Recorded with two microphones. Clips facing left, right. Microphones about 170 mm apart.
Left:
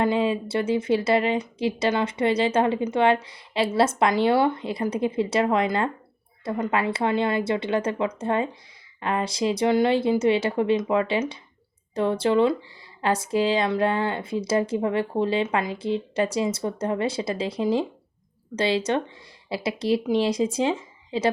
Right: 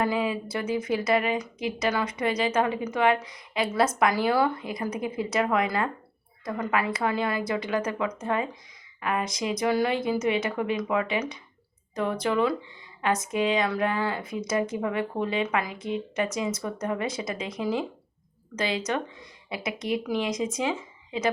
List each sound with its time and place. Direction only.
0.0 s speech: 30° left (ahead or behind)